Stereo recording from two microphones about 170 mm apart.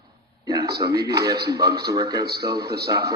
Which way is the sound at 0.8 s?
20° right (ahead or behind).